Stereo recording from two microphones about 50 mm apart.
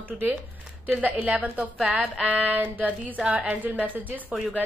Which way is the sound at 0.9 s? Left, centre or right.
Right.